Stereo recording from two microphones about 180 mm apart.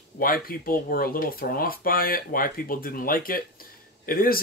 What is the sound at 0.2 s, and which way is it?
Speech, 55° left (ahead or behind).